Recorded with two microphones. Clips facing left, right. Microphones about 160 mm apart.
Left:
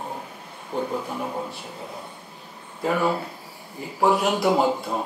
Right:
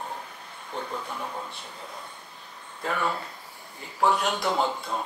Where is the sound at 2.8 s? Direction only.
10° left (ahead or behind).